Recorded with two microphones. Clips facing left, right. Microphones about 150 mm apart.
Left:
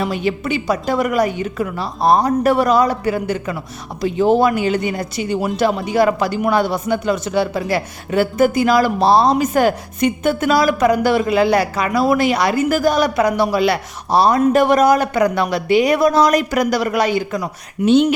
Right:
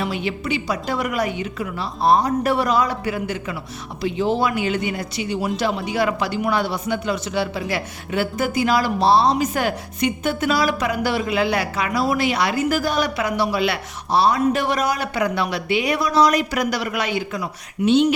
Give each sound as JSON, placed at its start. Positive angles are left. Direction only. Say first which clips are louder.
{"t": 0.0, "sound": "speech", "louder": "left 5 dB", "side_deg": 45}